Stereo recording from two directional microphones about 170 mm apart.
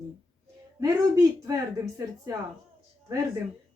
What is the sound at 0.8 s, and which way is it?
Speech, 20° right (ahead or behind).